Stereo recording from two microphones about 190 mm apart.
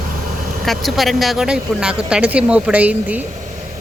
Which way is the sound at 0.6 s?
Centre (ahead or behind).